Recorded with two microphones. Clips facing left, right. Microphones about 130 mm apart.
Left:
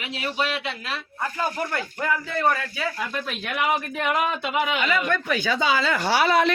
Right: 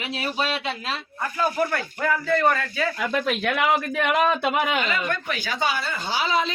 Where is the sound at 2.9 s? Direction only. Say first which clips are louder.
Right 5 dB; 85° right; by 4.6 s 70° right (ahead or behind).